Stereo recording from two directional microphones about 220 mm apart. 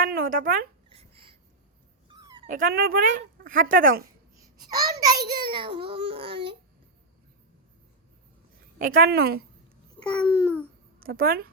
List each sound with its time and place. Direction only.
0.0 s speech: 40° right (ahead or behind)
0.9 s a sound: 25° right (ahead or behind)
2.0 s dog: 20° right (ahead or behind)
2.5 s speech: 40° right (ahead or behind)
5.0 s a child's voice: 20° right (ahead or behind)
8.8 s a woman's voice: 40° right (ahead or behind)
10.0 s babbling: 5° left (ahead or behind)
11.0 s a woman's voice: 40° right (ahead or behind)